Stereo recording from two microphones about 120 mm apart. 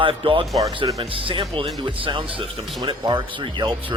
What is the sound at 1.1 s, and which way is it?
Speech, 50° right (ahead or behind).